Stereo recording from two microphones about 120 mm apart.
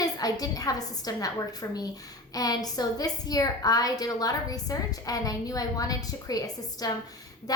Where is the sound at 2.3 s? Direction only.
30° left (ahead or behind).